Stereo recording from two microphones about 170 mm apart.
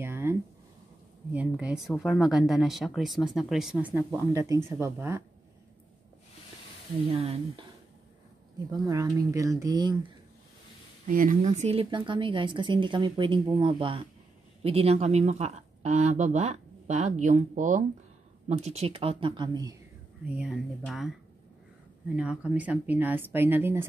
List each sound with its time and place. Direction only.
0.0 s a sound: 15° right (ahead or behind)
1.3 s speech: 5° right (ahead or behind)
7.1 s speech: 35° right (ahead or behind)
8.7 s speech: 20° right (ahead or behind)
11.1 s speech: 50° right (ahead or behind); by 19.7 s 25° right (ahead or behind)
20.2 s speech: 5° right (ahead or behind)
22.1 s speech: 5° right (ahead or behind)